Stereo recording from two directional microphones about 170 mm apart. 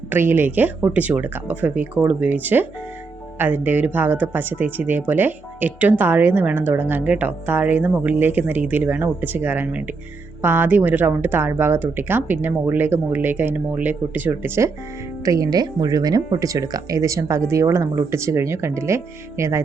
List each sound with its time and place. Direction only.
0.1 s speech: 15° right (ahead or behind)